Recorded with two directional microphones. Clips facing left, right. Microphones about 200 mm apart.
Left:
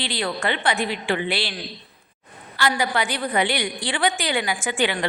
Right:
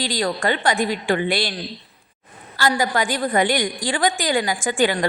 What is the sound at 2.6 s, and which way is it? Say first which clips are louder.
A woman's voice: right 2 dB; 40° right (ahead or behind).